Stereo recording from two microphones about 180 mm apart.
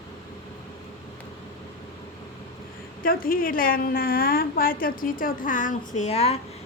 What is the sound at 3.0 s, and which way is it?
A woman's voice, 55° left (ahead or behind).